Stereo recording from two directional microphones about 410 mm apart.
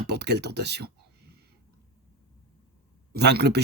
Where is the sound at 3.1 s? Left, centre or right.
Right.